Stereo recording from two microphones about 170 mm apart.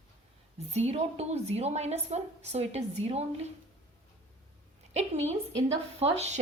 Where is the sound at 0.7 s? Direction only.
40° right (ahead or behind).